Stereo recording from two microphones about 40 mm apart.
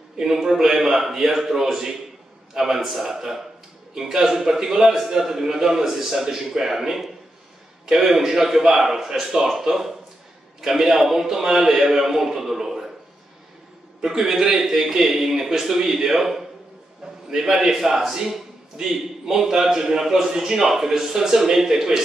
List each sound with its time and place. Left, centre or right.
0.2 s a man's voice: centre
14.0 s a man's voice: centre
17.0 s a sound: centre
17.4 s a man's voice: centre